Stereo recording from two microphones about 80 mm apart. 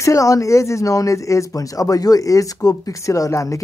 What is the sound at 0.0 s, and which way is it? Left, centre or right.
Speech, left.